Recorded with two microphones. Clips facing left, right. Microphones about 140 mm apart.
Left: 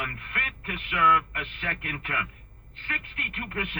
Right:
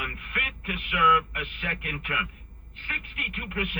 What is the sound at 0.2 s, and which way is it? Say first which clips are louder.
Speech: right 1 dB; 35° left (ahead or behind).